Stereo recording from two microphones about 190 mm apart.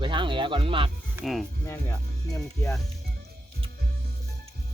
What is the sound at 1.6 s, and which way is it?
Speech, 15° left (ahead or behind).